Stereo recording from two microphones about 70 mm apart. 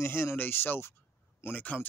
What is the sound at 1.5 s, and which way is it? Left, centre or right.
Speech, left.